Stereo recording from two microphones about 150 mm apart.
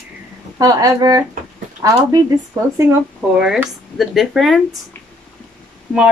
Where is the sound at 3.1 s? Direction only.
5° right (ahead or behind).